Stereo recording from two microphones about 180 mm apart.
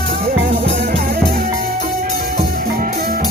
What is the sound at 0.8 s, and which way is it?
Music, 55° right (ahead or behind).